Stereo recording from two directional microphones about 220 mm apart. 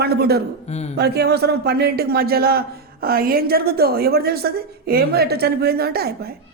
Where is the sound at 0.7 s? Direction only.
30° left (ahead or behind).